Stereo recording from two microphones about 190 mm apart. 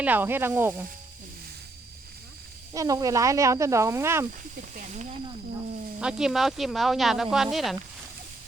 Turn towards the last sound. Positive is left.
turn(degrees=0)  # may be behind; listen again after turning